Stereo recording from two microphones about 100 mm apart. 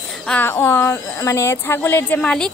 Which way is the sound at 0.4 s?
25° left (ahead or behind).